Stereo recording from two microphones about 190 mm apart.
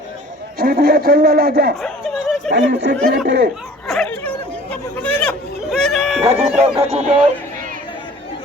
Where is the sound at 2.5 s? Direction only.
65° right (ahead or behind).